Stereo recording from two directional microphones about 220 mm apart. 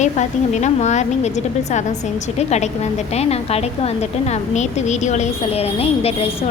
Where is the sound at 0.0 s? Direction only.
30° left (ahead or behind).